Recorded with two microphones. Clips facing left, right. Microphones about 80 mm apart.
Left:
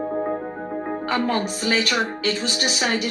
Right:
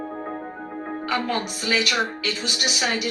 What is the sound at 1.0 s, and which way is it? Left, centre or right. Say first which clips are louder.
Speech: left 2 dB; left.